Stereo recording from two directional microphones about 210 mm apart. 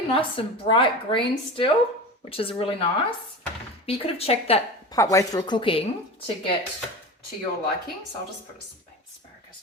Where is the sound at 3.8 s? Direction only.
25° left (ahead or behind).